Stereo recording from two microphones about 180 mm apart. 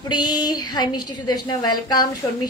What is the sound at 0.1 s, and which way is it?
A woman's voice, 25° left (ahead or behind).